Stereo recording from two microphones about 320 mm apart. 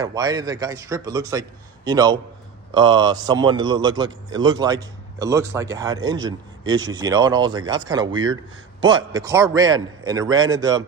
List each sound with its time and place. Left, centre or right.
0.0 s speech: centre
8.0 s speech: right
8.8 s speech: centre